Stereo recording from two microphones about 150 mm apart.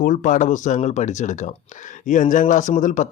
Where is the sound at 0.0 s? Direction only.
60° left (ahead or behind).